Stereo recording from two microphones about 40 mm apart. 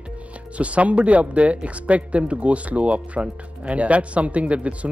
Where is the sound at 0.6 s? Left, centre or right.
Right.